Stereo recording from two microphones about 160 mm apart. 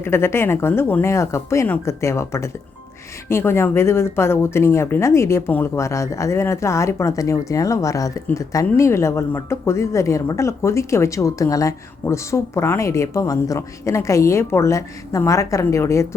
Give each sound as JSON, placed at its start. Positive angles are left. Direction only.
{"t": 0.0, "sound": "speech", "side_deg": 15}